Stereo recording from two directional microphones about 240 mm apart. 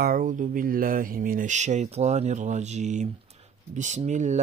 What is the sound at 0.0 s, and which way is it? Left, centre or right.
Speech, right.